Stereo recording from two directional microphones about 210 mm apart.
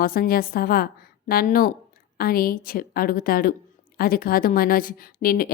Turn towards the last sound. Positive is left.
turn(degrees=45)  # may be behind; listen again after turning